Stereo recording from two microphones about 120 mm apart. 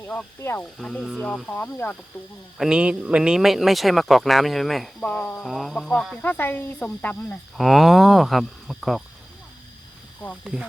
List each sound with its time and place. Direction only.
0.0 s speech: 15° left (ahead or behind)
1.5 s speech: 15° left (ahead or behind)
2.6 s speech: 10° right (ahead or behind)
4.9 s speech: 10° left (ahead or behind)
6.2 s speech: 15° left (ahead or behind)
7.5 s speech: centre (ahead or behind)
10.4 s speech: 5° right (ahead or behind)